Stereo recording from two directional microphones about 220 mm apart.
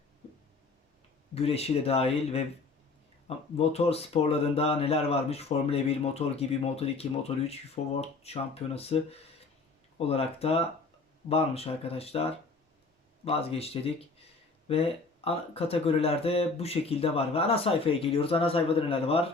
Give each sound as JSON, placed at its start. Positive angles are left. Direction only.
{"t": 1.4, "sound": "speech", "side_deg": 25}